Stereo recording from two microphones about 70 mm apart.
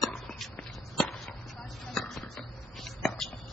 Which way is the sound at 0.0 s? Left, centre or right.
Centre.